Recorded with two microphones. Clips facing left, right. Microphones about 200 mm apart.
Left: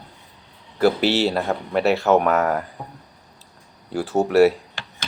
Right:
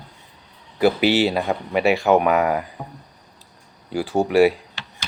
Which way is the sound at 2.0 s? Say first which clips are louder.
Right 1 dB; 15° right (ahead or behind).